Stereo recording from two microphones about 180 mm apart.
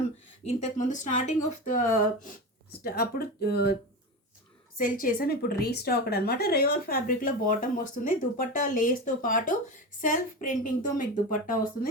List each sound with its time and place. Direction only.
0.4 s a woman's voice: 40° left (ahead or behind)
2.8 s speech: 60° left (ahead or behind)
4.8 s a woman's voice: 50° left (ahead or behind)